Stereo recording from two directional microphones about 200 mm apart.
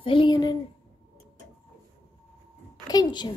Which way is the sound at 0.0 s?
25° left (ahead or behind).